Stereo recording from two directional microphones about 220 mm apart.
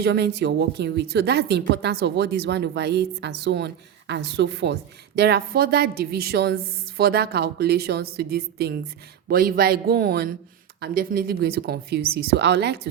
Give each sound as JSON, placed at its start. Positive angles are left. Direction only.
{"t": 0.0, "sound": "a woman's voice", "side_deg": -50}